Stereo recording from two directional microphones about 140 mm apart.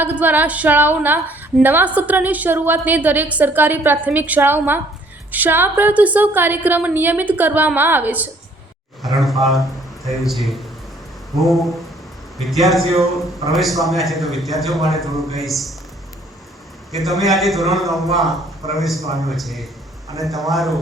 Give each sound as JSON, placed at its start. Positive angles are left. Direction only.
{"t": 0.0, "sound": "a woman's voice", "side_deg": -10}
{"t": 9.1, "sound": "a man's voice", "side_deg": 0}
{"t": 16.9, "sound": "a man's voice", "side_deg": 0}